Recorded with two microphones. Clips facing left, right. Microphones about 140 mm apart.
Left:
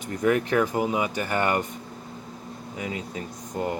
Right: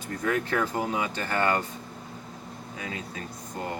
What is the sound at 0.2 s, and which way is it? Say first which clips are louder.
Speech: left 5 dB; 15° left (ahead or behind).